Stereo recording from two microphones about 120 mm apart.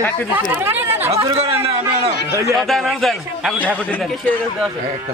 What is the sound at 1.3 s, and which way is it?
Speech, 55° right (ahead or behind).